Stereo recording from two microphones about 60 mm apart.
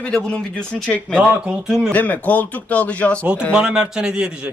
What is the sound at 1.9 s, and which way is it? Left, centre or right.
A man's voice, left.